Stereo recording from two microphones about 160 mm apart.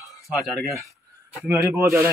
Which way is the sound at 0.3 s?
Centre (ahead or behind).